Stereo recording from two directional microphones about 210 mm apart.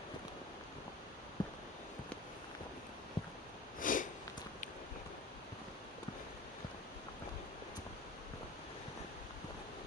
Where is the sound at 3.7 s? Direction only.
40° left (ahead or behind).